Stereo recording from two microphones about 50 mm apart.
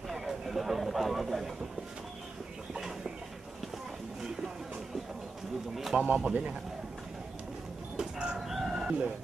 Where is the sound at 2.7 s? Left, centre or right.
Centre.